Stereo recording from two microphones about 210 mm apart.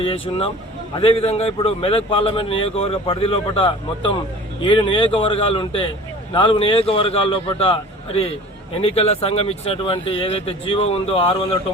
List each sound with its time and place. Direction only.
0.0 s a man's voice: 25° left (ahead or behind)